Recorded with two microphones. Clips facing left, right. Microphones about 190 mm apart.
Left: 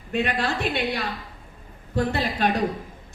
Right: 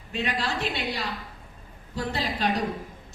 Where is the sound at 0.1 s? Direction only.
55° left (ahead or behind).